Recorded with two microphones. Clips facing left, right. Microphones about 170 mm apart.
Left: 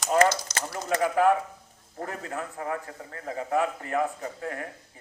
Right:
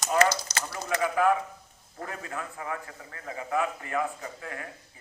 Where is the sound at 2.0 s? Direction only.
40° left (ahead or behind).